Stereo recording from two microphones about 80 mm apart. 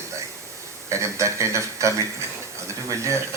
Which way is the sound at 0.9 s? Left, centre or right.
Right.